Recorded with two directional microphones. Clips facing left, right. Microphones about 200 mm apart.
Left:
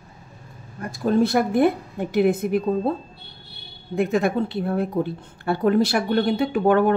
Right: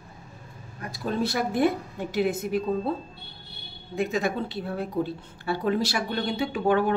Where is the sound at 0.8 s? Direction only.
50° left (ahead or behind).